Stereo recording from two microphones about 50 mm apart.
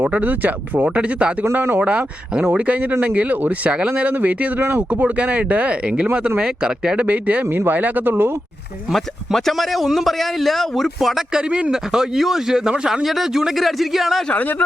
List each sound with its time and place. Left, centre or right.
0.0 s speech: right
0.8 s speech: right
8.9 s a man's voice: centre
11.3 s speech: centre